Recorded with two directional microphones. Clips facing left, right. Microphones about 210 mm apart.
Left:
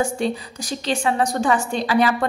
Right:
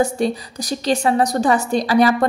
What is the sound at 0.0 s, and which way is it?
A woman's voice, 40° right (ahead or behind).